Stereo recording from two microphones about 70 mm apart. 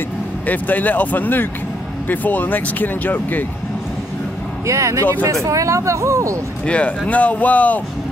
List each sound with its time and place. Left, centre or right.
0.5 s speech: left
4.6 s speech: right
6.6 s speech: centre